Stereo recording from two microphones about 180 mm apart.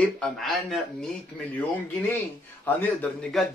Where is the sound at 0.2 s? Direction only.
Centre (ahead or behind).